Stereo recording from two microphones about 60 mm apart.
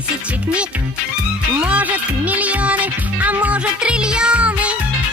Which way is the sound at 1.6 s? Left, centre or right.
Right.